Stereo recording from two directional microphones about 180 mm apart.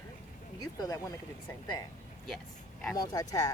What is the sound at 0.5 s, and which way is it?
Speech, 20° left (ahead or behind).